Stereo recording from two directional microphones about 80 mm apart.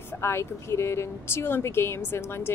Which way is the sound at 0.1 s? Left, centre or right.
Left.